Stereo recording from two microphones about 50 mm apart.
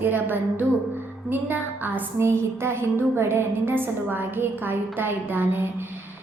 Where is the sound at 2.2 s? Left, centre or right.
Right.